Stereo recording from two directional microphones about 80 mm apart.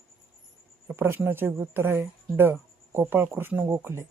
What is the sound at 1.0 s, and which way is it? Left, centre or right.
Speech, right.